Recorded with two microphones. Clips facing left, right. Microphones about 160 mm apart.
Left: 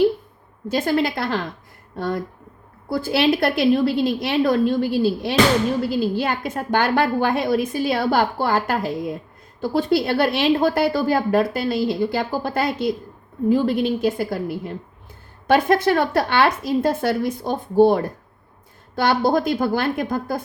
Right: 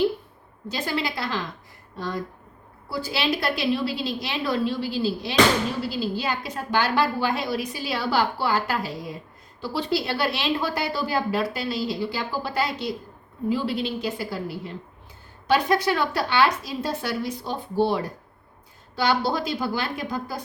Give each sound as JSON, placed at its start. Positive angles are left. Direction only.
{"t": 0.7, "sound": "a woman's voice", "side_deg": 50}